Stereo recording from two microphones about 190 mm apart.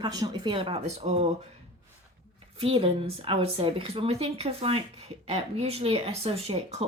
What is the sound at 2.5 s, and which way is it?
A woman's voice, 30° right (ahead or behind).